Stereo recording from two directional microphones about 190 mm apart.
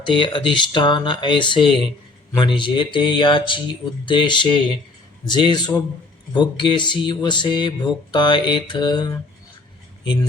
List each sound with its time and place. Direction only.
0.0 s speech: 25° left (ahead or behind)